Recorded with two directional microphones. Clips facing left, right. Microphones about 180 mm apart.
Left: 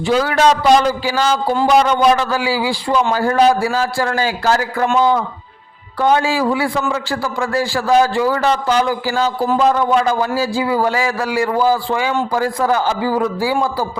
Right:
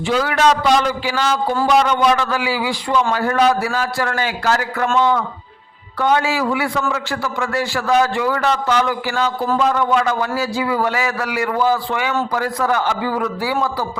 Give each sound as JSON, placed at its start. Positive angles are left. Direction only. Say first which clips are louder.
{"t": 0.1, "sound": "a man's voice", "louder": "left 2 dB", "side_deg": 40}